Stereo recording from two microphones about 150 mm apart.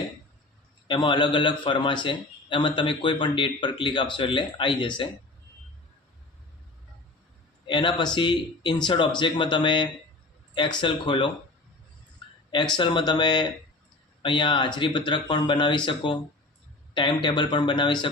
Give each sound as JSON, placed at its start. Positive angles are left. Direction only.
{"t": 0.9, "sound": "a man's voice", "side_deg": 30}
{"t": 7.7, "sound": "a man's voice", "side_deg": 30}
{"t": 12.7, "sound": "a man's voice", "side_deg": 30}